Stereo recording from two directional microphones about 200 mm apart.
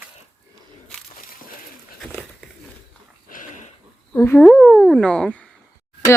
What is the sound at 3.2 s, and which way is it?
Dog, 40° left (ahead or behind).